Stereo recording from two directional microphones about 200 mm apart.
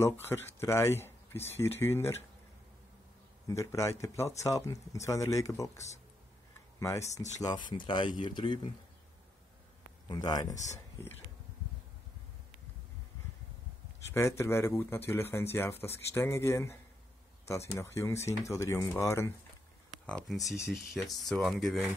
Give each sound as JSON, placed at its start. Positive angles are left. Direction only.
{"t": 0.0, "sound": "speech", "side_deg": 10}
{"t": 3.4, "sound": "speech", "side_deg": 15}
{"t": 10.0, "sound": "speech", "side_deg": 20}
{"t": 14.1, "sound": "speech", "side_deg": 15}
{"t": 20.1, "sound": "speech", "side_deg": 0}